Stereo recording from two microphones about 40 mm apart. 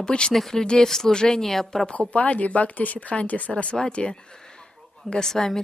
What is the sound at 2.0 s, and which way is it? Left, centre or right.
Speech, left.